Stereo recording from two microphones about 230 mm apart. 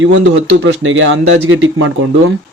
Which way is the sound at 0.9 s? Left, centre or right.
Right.